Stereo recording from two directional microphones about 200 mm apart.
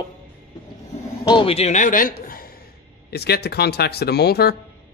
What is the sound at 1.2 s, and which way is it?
A man's voice, 25° left (ahead or behind).